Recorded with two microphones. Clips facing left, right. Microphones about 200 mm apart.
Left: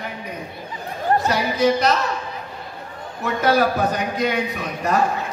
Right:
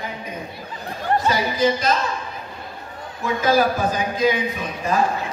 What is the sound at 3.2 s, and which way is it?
A man's voice, 65° left (ahead or behind).